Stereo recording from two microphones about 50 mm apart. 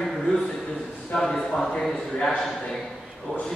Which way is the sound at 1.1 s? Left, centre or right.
Centre.